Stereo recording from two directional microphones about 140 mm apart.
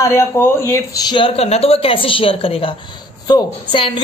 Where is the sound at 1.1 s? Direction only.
40° left (ahead or behind).